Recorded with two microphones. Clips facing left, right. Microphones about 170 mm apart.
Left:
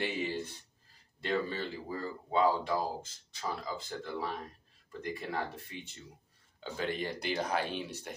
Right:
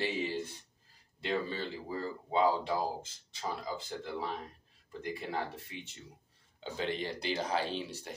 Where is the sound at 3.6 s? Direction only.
20° right (ahead or behind).